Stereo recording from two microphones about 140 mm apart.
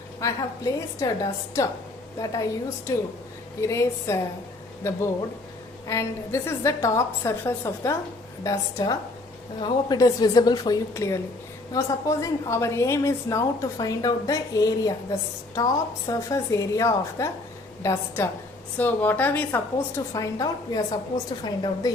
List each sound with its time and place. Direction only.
0.2 s a woman's voice: 25° left (ahead or behind)
20.1 s a woman's voice: 25° left (ahead or behind)